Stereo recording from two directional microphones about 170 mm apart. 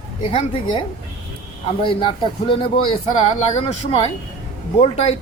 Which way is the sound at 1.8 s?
30° left (ahead or behind).